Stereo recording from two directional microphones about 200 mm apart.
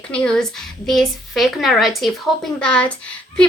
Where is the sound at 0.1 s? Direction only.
5° left (ahead or behind).